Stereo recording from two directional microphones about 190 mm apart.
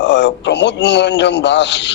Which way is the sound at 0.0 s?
70° left (ahead or behind).